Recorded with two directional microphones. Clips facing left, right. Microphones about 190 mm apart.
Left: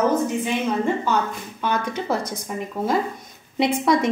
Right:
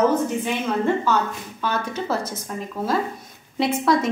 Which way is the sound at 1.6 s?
15° left (ahead or behind).